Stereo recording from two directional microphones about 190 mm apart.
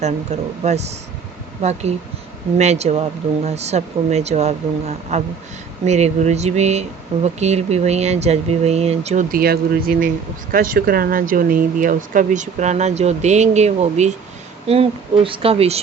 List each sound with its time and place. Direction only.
0.6 s speech: 35° right (ahead or behind)
9.3 s speech: 50° right (ahead or behind); by 15.8 s 30° right (ahead or behind)